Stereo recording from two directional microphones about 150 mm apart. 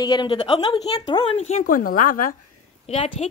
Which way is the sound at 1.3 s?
45° left (ahead or behind).